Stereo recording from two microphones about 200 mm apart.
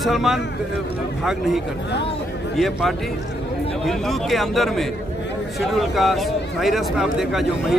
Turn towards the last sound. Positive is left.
turn(degrees=0)  # may be behind; listen again after turning